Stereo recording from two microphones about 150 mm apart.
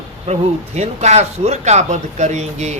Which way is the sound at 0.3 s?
50° right (ahead or behind).